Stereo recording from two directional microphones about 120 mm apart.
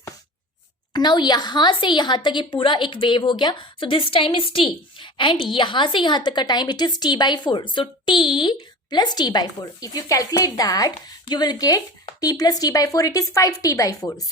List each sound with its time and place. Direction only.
0.9 s a woman's voice: 40° left (ahead or behind)